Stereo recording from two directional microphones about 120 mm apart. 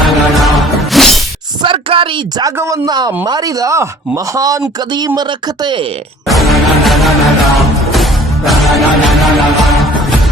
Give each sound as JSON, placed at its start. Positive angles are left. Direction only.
{"t": 0.0, "sound": "music", "side_deg": 0}
{"t": 1.6, "sound": "a sound", "side_deg": -45}
{"t": 2.6, "sound": "speech", "side_deg": -30}
{"t": 6.2, "sound": "music", "side_deg": 0}